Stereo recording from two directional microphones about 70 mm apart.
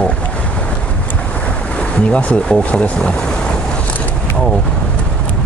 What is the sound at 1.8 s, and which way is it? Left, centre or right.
Speech, centre.